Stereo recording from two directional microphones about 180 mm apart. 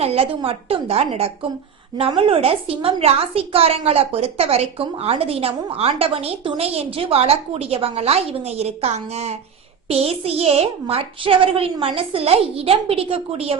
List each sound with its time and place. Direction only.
0.0 s a woman's voice: 35° right (ahead or behind)